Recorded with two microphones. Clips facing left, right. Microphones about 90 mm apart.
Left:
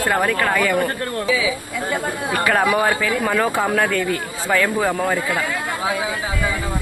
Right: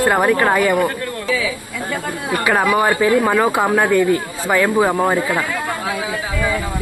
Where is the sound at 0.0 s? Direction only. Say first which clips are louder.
Right 4 dB; 20° right (ahead or behind).